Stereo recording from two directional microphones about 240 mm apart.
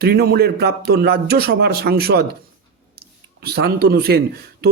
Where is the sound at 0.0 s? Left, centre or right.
Right.